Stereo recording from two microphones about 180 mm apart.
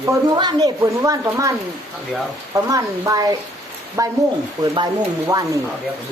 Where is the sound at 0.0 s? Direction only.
25° right (ahead or behind).